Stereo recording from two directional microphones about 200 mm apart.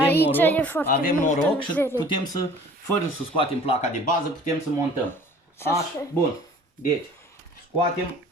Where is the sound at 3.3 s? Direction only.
30° left (ahead or behind).